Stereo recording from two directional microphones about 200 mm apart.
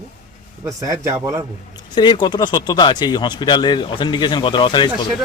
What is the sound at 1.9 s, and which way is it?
Speech, 20° left (ahead or behind).